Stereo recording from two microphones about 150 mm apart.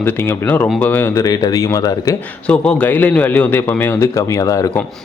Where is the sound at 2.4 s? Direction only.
10° left (ahead or behind).